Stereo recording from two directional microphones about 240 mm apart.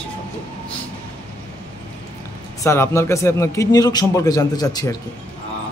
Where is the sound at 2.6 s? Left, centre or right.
Centre.